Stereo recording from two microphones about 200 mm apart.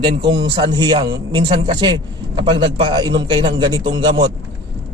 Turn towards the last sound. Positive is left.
turn(degrees=-20)  # may be behind; listen again after turning